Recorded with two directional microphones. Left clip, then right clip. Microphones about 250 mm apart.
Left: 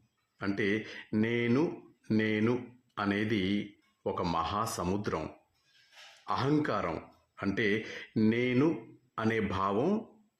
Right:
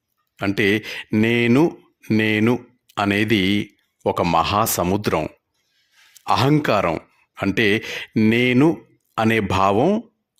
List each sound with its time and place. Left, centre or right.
0.3 s speech: right